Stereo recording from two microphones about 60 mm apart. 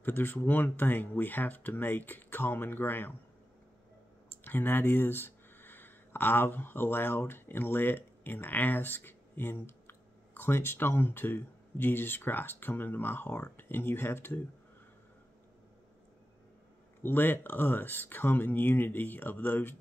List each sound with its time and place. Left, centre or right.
0.0 s speech: left
4.5 s speech: left
17.0 s speech: left